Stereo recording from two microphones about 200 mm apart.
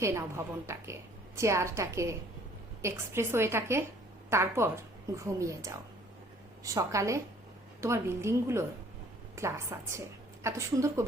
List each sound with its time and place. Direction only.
0.0 s a woman's voice: 15° right (ahead or behind)